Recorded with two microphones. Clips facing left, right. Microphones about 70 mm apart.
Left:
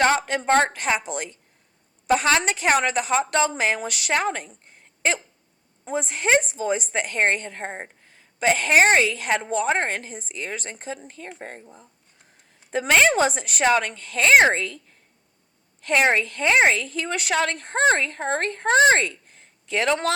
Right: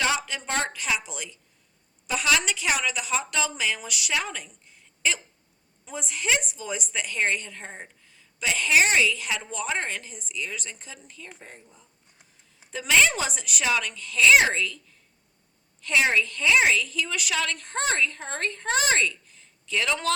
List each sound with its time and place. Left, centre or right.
0.0 s a woman's voice: left
12.7 s a woman's voice: left